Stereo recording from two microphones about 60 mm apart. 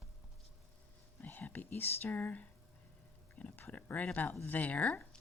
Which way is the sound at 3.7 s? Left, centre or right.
Left.